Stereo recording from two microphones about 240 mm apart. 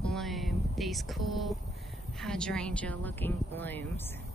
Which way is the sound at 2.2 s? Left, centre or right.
Centre.